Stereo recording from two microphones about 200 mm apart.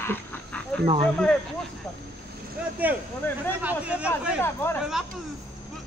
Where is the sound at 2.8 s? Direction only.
10° right (ahead or behind).